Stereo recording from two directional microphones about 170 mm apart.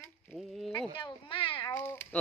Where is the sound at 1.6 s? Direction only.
15° left (ahead or behind).